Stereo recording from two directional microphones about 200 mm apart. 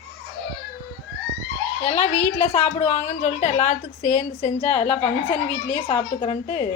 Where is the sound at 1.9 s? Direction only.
30° left (ahead or behind).